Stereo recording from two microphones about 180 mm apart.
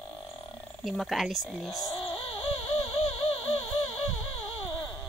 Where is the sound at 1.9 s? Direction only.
35° left (ahead or behind).